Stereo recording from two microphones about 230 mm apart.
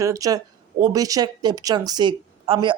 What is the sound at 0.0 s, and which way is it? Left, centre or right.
Speech, centre.